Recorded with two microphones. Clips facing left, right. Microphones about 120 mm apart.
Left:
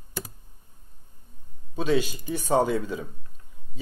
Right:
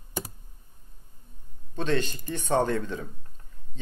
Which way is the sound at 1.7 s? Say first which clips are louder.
Left 3 dB; 10° left (ahead or behind).